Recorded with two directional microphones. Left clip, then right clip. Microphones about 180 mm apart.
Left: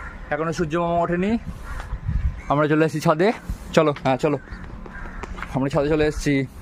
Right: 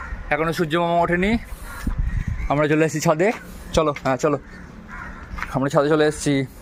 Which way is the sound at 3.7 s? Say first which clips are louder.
Left 1 dB; 40° left (ahead or behind).